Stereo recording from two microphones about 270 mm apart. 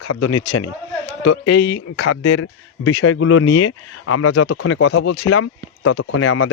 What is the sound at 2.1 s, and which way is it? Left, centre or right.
Speech, left.